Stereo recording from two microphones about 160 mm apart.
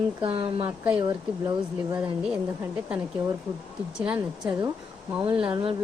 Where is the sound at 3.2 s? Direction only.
20° right (ahead or behind).